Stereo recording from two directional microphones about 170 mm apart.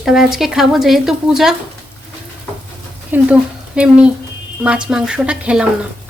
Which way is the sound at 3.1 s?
5° right (ahead or behind).